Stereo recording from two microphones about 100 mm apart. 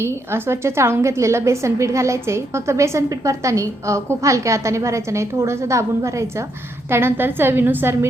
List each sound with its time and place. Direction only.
0.0 s a woman's voice: 25° right (ahead or behind)